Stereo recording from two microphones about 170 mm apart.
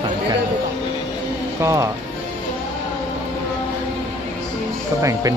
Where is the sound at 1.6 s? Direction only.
20° right (ahead or behind).